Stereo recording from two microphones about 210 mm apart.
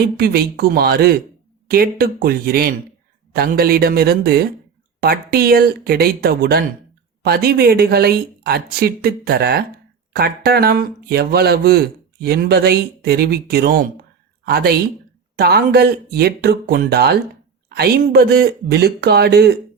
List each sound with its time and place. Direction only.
0.0 s speech: 50° right (ahead or behind)